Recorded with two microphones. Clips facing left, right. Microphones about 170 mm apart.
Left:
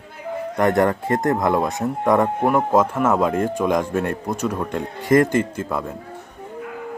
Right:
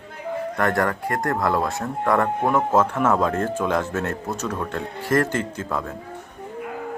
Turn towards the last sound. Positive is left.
turn(degrees=10)  # may be behind; listen again after turning